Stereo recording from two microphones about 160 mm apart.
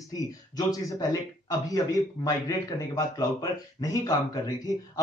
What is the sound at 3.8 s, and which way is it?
Speech, 20° left (ahead or behind).